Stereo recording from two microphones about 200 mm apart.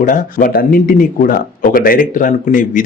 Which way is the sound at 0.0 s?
40° left (ahead or behind).